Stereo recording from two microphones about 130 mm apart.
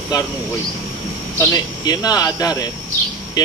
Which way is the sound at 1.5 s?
30° left (ahead or behind).